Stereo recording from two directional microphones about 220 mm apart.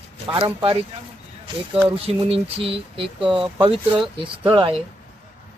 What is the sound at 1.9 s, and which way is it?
Speech, 25° right (ahead or behind).